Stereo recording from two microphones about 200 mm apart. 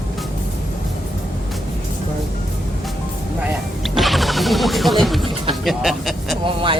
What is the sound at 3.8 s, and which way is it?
Music, centre (ahead or behind).